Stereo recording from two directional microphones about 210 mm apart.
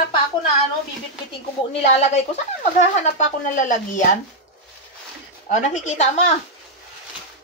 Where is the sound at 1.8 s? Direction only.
30° left (ahead or behind).